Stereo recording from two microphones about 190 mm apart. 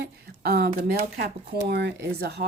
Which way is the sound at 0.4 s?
55° right (ahead or behind).